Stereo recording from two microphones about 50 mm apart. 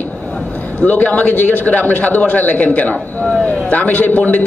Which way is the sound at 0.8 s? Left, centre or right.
Left.